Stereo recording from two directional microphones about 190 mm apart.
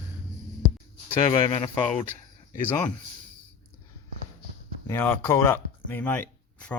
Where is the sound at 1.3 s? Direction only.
25° left (ahead or behind).